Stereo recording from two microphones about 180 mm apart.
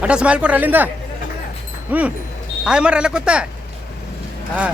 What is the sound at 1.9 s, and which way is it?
Speech, 10° right (ahead or behind).